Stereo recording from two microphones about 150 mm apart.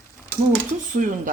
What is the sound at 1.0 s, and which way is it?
Speech, 60° right (ahead or behind).